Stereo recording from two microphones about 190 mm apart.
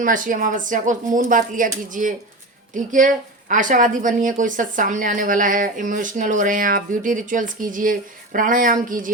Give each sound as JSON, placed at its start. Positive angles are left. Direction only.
{"t": 0.0, "sound": "speech", "side_deg": -45}